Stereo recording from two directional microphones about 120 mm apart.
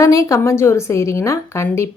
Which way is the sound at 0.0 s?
25° left (ahead or behind).